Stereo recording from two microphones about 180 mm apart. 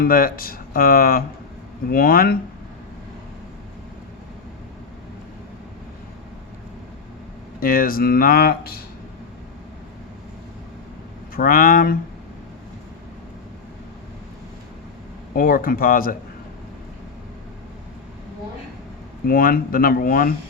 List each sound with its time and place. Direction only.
0.0 s speech: 55° left (ahead or behind)
7.6 s speech: 50° left (ahead or behind)
11.3 s speech: 50° left (ahead or behind)
15.3 s speech: 50° left (ahead or behind)
19.2 s speech: 55° left (ahead or behind)